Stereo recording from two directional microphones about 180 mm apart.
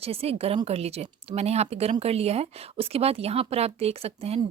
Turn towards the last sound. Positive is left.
turn(degrees=-35)  # may be behind; listen again after turning